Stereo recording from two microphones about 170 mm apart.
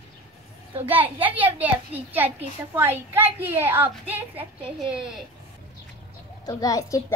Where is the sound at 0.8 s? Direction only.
10° right (ahead or behind).